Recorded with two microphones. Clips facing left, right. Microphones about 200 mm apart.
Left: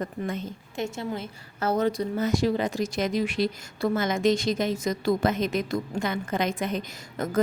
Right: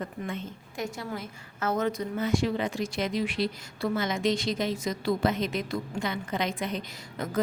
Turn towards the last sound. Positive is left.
turn(degrees=50)  # may be behind; listen again after turning